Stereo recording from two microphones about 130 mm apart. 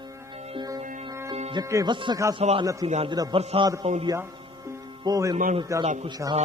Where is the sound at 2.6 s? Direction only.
25° right (ahead or behind).